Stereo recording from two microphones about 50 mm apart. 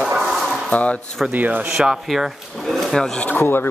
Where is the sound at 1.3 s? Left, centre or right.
Right.